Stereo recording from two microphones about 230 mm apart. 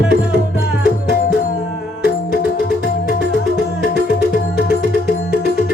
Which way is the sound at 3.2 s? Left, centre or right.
Left.